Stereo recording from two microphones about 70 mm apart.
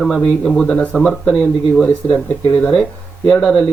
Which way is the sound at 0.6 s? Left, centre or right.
Centre.